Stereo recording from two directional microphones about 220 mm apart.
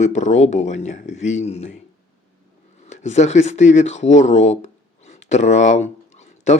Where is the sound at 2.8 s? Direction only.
30° left (ahead or behind).